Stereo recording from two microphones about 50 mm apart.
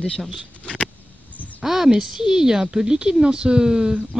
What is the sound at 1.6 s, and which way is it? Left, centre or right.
Speech, centre.